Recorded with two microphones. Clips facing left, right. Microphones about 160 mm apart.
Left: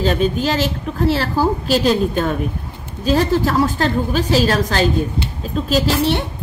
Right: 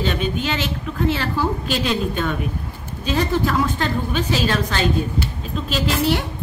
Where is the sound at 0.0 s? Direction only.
40° left (ahead or behind).